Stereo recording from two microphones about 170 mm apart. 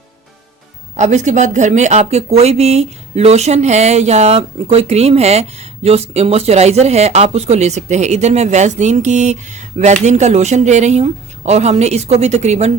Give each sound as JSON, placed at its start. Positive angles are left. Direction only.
{"t": 0.9, "sound": "a woman's voice", "side_deg": -45}